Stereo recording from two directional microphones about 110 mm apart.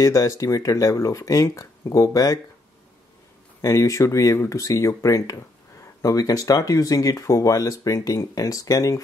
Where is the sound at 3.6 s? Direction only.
30° left (ahead or behind).